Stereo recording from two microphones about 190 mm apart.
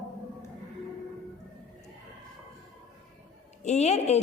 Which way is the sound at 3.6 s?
35° left (ahead or behind).